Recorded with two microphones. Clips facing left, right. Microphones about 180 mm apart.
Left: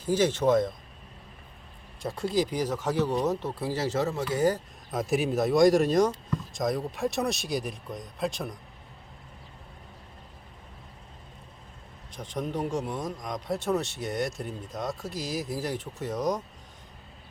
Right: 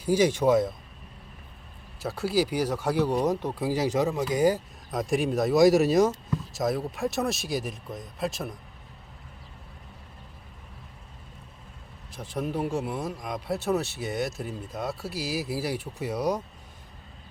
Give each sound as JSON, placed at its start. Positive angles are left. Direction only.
{"t": 0.0, "sound": "speech", "side_deg": -10}
{"t": 2.0, "sound": "speech", "side_deg": -5}
{"t": 4.9, "sound": "speech", "side_deg": 0}
{"t": 12.1, "sound": "speech", "side_deg": -5}